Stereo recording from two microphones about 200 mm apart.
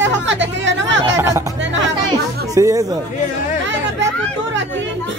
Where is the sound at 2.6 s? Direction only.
15° right (ahead or behind).